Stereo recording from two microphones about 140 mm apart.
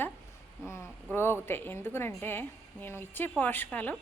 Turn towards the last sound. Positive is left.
turn(degrees=10)  # may be behind; listen again after turning